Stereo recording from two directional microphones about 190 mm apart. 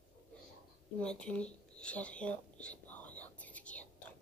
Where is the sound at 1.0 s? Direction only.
5° left (ahead or behind).